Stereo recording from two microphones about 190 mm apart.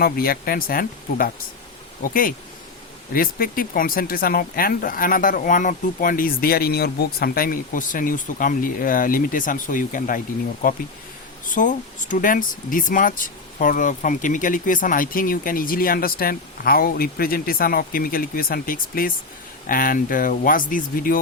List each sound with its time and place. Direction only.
0.0 s speech: 50° left (ahead or behind)
11.4 s speech: 45° left (ahead or behind)